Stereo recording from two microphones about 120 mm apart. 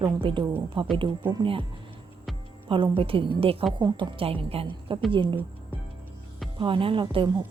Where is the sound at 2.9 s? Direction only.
50° right (ahead or behind).